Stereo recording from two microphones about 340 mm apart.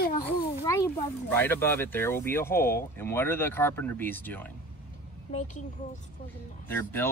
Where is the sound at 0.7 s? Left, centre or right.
Centre.